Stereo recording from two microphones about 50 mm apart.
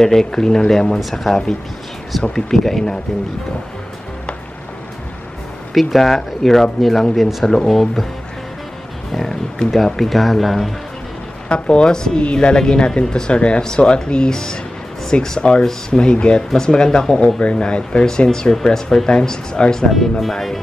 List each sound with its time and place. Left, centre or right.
0.0 s speech: centre
5.8 s speech: centre
7.4 s speech: centre
9.1 s speech: centre
11.4 s a woman's voice: left
19.9 s speech: centre